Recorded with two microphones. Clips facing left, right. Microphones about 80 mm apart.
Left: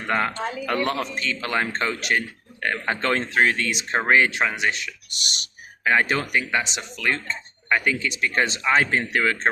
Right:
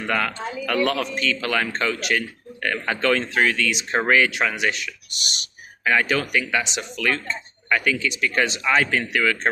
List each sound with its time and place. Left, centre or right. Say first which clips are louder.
0.1 s speech: left 1 dB; left
0.3 s speech: left 2 dB; left
0.6 s speech: right 3 dB; left